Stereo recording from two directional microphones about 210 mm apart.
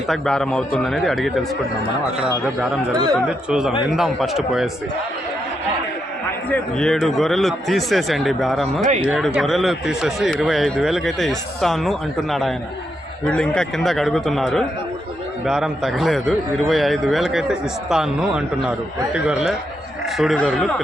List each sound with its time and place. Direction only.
0.1 s speech: centre (ahead or behind)
2.9 s speech: 20° right (ahead or behind)
3.2 s speech: 5° right (ahead or behind)
6.5 s speech: 5° left (ahead or behind)